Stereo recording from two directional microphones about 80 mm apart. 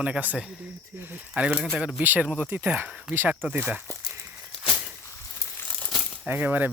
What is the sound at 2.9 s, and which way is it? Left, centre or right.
Speech, centre.